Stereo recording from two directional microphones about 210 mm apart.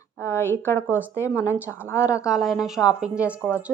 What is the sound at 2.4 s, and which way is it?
Speech, centre (ahead or behind).